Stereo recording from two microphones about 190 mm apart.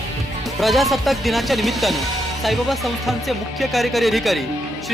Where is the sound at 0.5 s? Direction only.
Centre (ahead or behind).